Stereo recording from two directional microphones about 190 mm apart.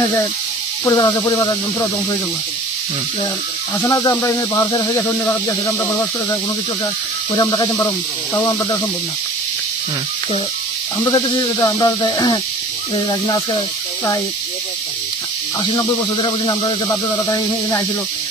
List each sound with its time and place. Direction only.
0.0 s snake: 15° left (ahead or behind)
3.8 s snake: 15° left (ahead or behind)
7.3 s speech: 20° left (ahead or behind)
8.4 s snake: 15° left (ahead or behind)
11.1 s speech: 20° left (ahead or behind)
15.6 s speech: 25° left (ahead or behind)